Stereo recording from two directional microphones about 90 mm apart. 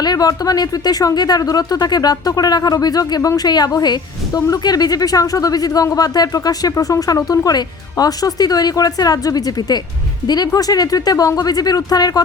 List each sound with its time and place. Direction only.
0.0 s speech: 45° left (ahead or behind)